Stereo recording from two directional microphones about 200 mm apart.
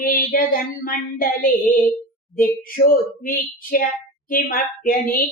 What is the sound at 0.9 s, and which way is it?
Speech, 45° left (ahead or behind).